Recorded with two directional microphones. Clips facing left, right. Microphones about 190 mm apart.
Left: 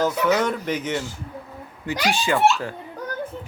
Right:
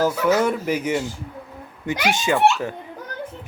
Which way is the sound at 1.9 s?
20° right (ahead or behind).